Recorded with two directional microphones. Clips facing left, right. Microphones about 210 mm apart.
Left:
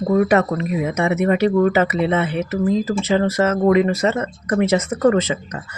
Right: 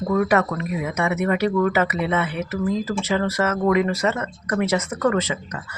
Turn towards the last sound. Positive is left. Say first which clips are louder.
# left 4 dB
turn(degrees=25)  # may be behind; listen again after turning